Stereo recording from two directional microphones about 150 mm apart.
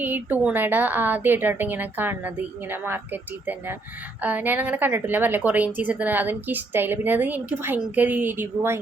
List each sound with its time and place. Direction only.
0.0 s a woman's voice: 10° right (ahead or behind)